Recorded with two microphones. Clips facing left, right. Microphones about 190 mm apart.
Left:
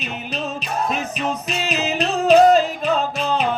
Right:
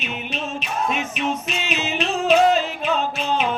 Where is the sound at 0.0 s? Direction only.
35° left (ahead or behind).